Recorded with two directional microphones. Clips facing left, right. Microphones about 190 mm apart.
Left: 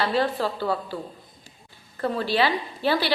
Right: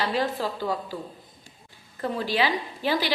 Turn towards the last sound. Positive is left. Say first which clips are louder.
# left 2 dB
turn(degrees=-15)  # may be behind; listen again after turning